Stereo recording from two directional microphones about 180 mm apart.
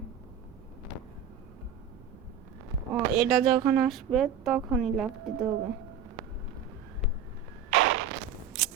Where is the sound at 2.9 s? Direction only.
Centre (ahead or behind).